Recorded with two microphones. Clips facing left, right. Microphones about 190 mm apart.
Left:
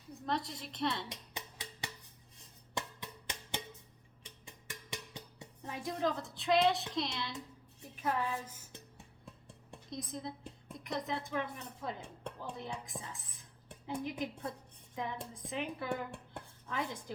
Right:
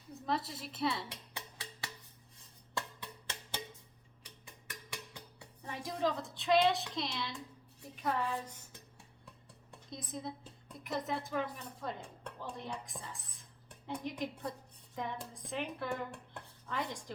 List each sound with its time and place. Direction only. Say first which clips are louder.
0.1 s a woman's voice: even; 5° right (ahead or behind)
1.1 s music: left 1 dB; 15° left (ahead or behind)
4.7 s music: left 2 dB; 20° left (ahead or behind)
5.6 s a woman's voice: even; centre (ahead or behind)
9.9 s a woman's voice: left 1 dB; centre (ahead or behind)
12.4 s cutlery: right 1 dB; centre (ahead or behind)
14.9 s speech: even; centre (ahead or behind)